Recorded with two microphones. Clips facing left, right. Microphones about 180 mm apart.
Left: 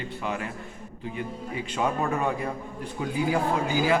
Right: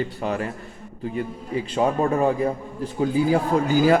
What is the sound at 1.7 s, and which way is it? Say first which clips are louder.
Speech: right 6 dB; 35° right (ahead or behind).